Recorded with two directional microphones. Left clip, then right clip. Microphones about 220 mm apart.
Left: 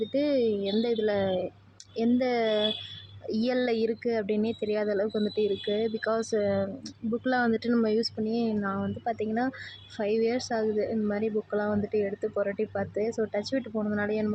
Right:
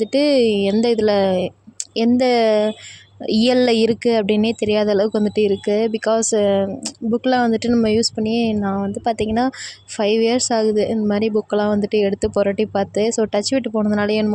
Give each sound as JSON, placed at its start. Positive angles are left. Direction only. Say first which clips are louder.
{"t": 0.0, "sound": "speech", "louder": "right 10 dB", "side_deg": -35}